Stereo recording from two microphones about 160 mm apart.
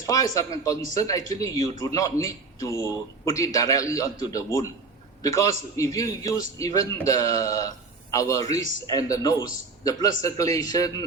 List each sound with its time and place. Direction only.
0.0 s a man's voice: 20° left (ahead or behind)